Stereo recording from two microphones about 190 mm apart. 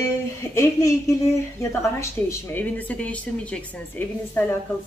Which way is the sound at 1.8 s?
15° left (ahead or behind).